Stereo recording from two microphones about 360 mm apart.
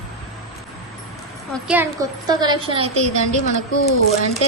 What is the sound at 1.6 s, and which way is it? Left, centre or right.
A woman's voice, centre.